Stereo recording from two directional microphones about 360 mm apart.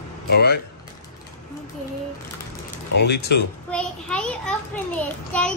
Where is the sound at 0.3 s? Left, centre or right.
Left.